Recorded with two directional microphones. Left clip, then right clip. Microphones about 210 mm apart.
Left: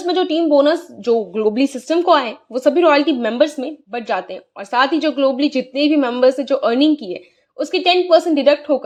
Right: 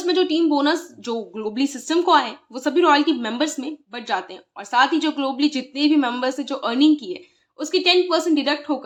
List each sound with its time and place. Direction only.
0.0 s a woman's voice: 15° left (ahead or behind)